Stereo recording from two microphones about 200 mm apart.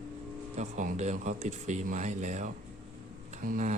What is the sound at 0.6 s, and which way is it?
Speech, 35° right (ahead or behind).